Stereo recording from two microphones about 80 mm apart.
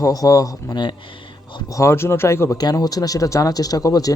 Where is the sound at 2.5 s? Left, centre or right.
Left.